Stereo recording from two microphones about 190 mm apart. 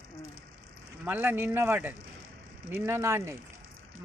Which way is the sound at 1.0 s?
10° right (ahead or behind).